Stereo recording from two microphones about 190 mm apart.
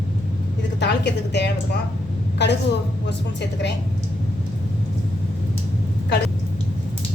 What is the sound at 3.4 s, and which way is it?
Speech, 65° left (ahead or behind).